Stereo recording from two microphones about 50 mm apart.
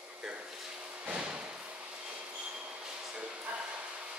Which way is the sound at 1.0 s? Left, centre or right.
Right.